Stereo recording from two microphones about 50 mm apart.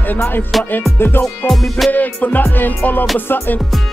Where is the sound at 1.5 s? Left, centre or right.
Centre.